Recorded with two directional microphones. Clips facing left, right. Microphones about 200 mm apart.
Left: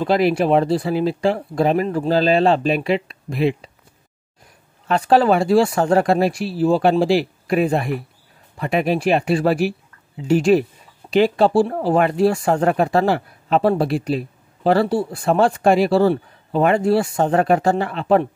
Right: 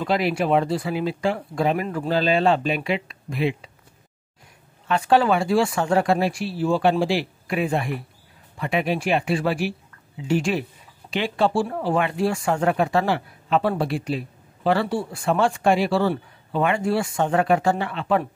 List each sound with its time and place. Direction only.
0.0 s speech: 40° left (ahead or behind)
4.8 s speech: 35° left (ahead or behind)